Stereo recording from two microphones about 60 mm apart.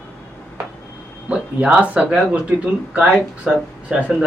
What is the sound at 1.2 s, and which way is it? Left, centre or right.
Speech, centre.